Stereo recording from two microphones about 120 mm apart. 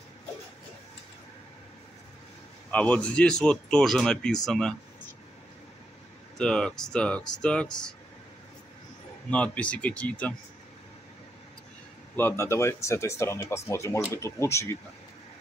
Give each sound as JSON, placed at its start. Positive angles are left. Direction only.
{"t": 2.7, "sound": "speech", "side_deg": 10}
{"t": 6.3, "sound": "speech", "side_deg": 5}
{"t": 9.3, "sound": "speech", "side_deg": 10}
{"t": 12.2, "sound": "speech", "side_deg": 20}